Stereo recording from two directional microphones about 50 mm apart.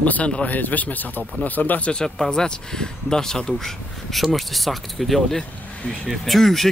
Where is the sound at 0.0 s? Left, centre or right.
Left.